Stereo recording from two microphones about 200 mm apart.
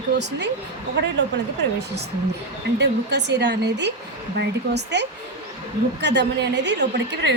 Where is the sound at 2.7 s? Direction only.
60° right (ahead or behind).